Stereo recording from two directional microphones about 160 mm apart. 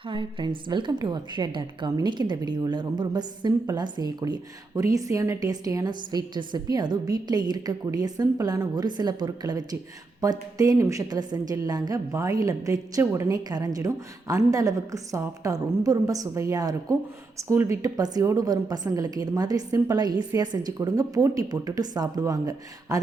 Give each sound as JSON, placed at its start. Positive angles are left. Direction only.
{"t": 0.1, "sound": "a woman's voice", "side_deg": -30}